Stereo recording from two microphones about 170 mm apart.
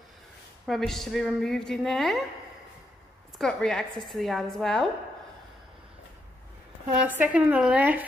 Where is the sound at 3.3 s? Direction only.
5° left (ahead or behind).